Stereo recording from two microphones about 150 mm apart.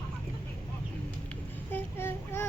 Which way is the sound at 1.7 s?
15° left (ahead or behind).